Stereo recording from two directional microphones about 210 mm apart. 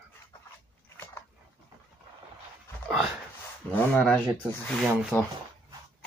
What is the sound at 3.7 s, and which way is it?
Speech, 5° left (ahead or behind).